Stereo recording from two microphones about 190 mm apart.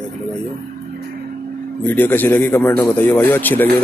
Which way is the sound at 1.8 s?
10° left (ahead or behind).